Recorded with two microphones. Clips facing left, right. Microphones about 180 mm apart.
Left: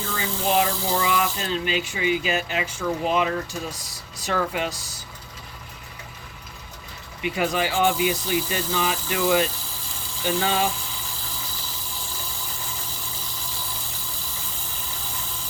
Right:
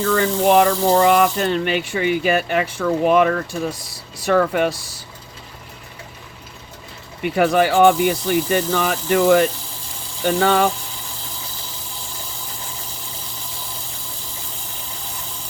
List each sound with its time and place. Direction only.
0.0 s speech: 65° right (ahead or behind)
7.2 s speech: 60° right (ahead or behind)